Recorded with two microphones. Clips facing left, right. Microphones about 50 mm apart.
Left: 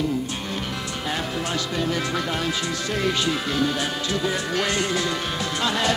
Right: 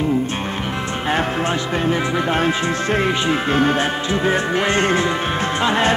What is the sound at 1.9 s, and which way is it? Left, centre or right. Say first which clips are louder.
Speech: right 6 dB; right.